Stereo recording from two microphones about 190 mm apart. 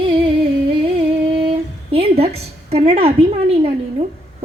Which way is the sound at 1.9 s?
30° right (ahead or behind).